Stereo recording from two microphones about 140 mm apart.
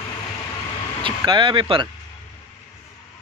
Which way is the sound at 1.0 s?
35° right (ahead or behind).